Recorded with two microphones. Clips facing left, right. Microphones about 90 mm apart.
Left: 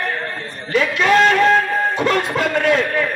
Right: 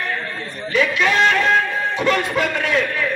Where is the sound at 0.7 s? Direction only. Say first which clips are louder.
Left 3 dB; 40° left (ahead or behind).